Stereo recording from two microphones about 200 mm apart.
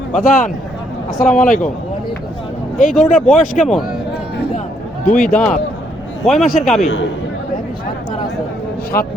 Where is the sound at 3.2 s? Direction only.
40° left (ahead or behind).